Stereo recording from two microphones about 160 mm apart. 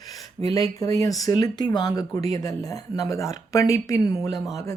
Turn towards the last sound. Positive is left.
turn(degrees=20)  # may be behind; listen again after turning